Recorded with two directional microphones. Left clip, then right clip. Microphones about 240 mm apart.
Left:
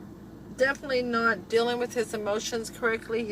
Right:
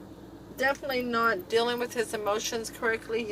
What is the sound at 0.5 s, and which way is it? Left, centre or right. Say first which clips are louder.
Speech: left 2 dB; centre.